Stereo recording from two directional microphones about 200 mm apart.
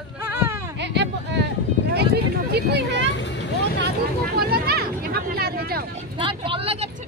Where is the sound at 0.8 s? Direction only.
60° right (ahead or behind).